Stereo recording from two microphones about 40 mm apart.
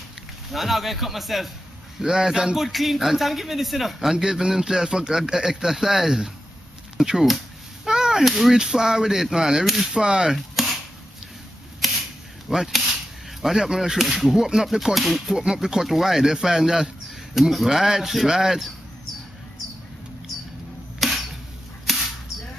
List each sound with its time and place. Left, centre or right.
0.5 s a man's voice: centre
7.0 s a sound: centre
8.3 s speech: centre
8.5 s a man's voice: centre
10.3 s chopping: centre
12.4 s a man's voice: centre
15.4 s a man's voice: centre
21.0 s camera: centre